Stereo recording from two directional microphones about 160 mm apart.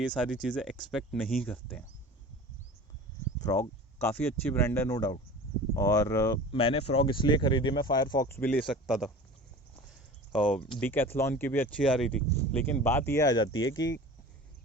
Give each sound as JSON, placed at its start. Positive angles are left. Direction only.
{"t": 0.4, "sound": "speech", "side_deg": 0}
{"t": 3.3, "sound": "speech", "side_deg": 20}
{"t": 8.3, "sound": "speech", "side_deg": 10}
{"t": 10.3, "sound": "speech", "side_deg": 5}